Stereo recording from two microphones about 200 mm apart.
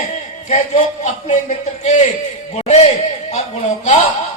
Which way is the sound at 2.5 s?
35° left (ahead or behind).